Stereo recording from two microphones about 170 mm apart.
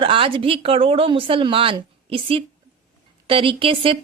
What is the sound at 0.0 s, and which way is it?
Speech, 30° right (ahead or behind).